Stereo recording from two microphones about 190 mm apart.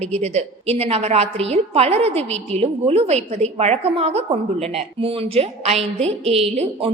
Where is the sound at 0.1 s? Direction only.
35° right (ahead or behind).